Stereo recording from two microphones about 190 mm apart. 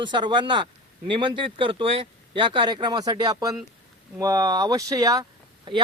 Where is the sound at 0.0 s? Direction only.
25° right (ahead or behind).